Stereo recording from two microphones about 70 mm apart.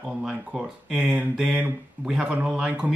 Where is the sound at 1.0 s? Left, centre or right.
Centre.